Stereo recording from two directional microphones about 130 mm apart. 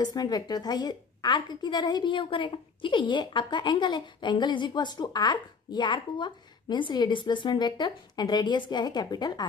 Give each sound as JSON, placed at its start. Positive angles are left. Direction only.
{"t": 0.0, "sound": "a woman's voice", "side_deg": 30}